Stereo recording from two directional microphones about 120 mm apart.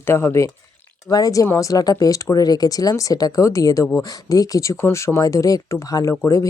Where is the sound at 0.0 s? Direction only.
20° left (ahead or behind).